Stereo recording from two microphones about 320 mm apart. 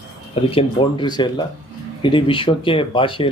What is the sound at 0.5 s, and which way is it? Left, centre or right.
Speech, centre.